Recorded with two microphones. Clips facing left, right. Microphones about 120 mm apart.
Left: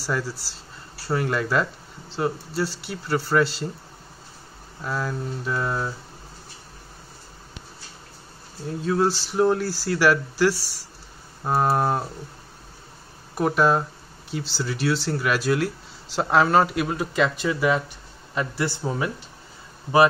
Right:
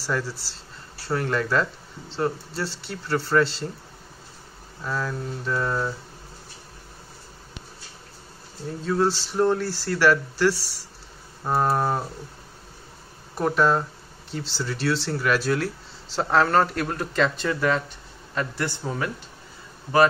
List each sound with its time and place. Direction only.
0.0 s speech: centre (ahead or behind)
4.8 s speech: 10° left (ahead or behind)
8.6 s speech: 5° left (ahead or behind)
13.3 s a man's voice: 5° left (ahead or behind)